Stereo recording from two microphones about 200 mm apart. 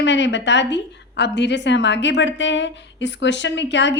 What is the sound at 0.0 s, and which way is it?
A woman's voice, 65° left (ahead or behind).